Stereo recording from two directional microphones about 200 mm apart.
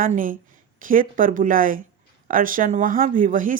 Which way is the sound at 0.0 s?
45° right (ahead or behind).